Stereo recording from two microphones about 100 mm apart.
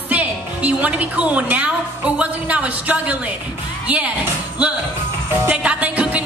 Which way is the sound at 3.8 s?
15° right (ahead or behind).